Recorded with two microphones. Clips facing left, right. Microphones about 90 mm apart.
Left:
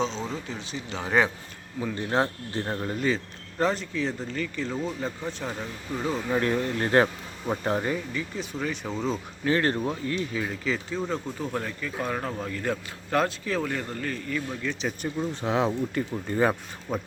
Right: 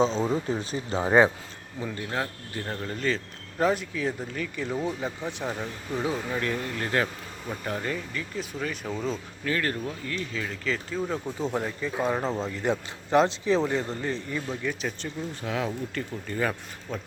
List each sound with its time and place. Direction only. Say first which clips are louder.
0.0 s speech: right 5 dB; 40° right (ahead or behind)
2.0 s speech: left 7 dB; 30° left (ahead or behind)
2.8 s speech: left 1 dB; 5° left (ahead or behind)
3.6 s speech: right 1 dB; 5° right (ahead or behind)
6.3 s speech: left 4 dB; 30° left (ahead or behind)
8.1 s speech: left 1 dB; centre (ahead or behind)
9.4 s speech: left 5 dB; 25° left (ahead or behind)
10.7 s speech: right 1 dB; centre (ahead or behind)
11.3 s a man's voice: right 2 dB; 20° right (ahead or behind)
15.0 s speech: left 5 dB; 25° left (ahead or behind)
16.9 s speech: left 4 dB; 10° left (ahead or behind)